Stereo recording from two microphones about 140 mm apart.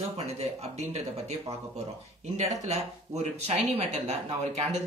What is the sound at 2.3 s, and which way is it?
A woman's voice, 55° right (ahead or behind).